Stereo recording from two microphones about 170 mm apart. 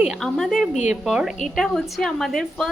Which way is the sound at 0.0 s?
Centre (ahead or behind).